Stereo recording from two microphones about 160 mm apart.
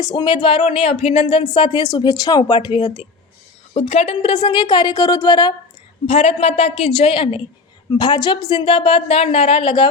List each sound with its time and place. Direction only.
0.0 s speech: 25° left (ahead or behind)
6.1 s a woman's voice: 40° left (ahead or behind)